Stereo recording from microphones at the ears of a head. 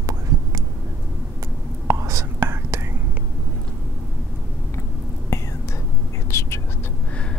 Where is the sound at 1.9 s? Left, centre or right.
Right.